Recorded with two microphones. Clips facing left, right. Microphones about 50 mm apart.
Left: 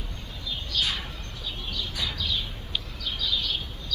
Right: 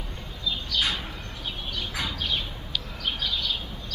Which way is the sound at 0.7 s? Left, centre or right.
Right.